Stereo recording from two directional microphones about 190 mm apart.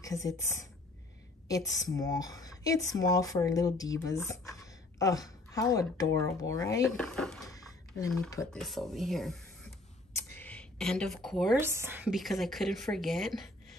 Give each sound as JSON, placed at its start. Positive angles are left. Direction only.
{"t": 0.0, "sound": "speech", "side_deg": 15}
{"t": 7.0, "sound": "speech", "side_deg": 5}
{"t": 7.5, "sound": "a sound", "side_deg": 20}
{"t": 8.5, "sound": "speech", "side_deg": 0}
{"t": 10.1, "sound": "a sound", "side_deg": 10}
{"t": 11.6, "sound": "speech", "side_deg": -15}